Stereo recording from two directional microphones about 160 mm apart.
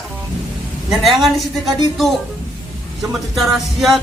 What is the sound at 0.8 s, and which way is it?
Speech, centre (ahead or behind).